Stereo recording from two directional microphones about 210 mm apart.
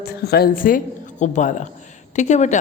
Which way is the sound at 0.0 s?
50° left (ahead or behind).